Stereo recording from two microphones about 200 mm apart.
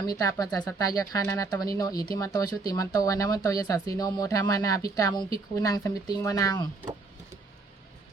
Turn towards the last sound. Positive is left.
turn(degrees=20)  # may be behind; listen again after turning